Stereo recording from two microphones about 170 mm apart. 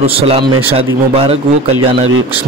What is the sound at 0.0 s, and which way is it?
A man's voice, 35° right (ahead or behind).